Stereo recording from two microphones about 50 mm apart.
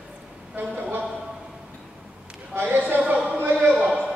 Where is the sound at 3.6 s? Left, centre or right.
Centre.